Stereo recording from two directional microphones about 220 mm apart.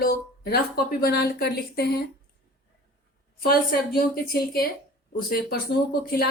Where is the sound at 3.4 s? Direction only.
45° left (ahead or behind).